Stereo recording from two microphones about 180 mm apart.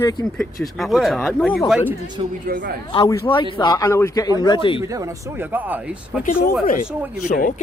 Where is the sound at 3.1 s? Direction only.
25° left (ahead or behind).